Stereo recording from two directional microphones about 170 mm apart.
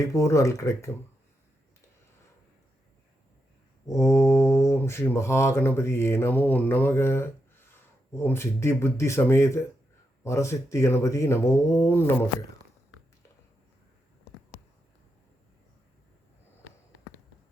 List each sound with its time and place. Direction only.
0.0 s speech: 20° left (ahead or behind)
3.8 s mantra: 15° left (ahead or behind)
7.7 s speech: 15° left (ahead or behind)
10.2 s mantra: 15° left (ahead or behind)